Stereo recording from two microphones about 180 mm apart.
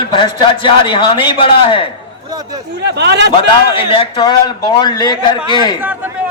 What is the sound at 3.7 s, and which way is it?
A man's voice, 30° left (ahead or behind).